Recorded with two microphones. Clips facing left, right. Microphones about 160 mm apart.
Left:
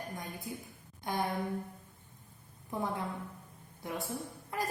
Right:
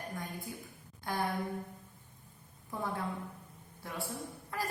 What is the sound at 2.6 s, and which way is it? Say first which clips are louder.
A woman's voice: left 1 dB; 20° left (ahead or behind).